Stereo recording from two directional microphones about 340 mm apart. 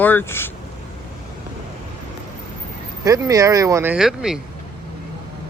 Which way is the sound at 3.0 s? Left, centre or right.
Centre.